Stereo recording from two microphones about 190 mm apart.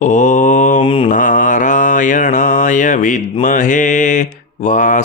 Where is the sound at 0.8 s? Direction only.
25° left (ahead or behind).